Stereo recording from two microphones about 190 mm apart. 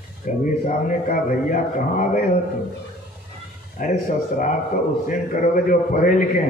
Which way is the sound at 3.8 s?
45° left (ahead or behind).